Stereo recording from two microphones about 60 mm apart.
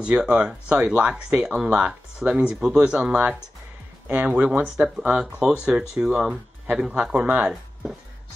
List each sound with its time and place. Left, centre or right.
0.0 s speech: centre
4.1 s speech: right
4.6 s speech: centre
7.2 s speech: right